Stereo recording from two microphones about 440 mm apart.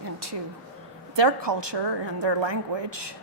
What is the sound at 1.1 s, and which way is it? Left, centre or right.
A woman's voice, right.